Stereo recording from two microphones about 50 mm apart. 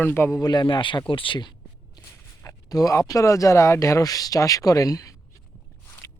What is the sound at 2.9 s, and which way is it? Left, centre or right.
Speech, left.